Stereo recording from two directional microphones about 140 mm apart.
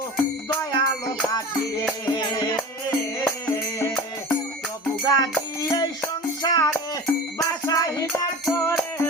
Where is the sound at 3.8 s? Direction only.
20° left (ahead or behind).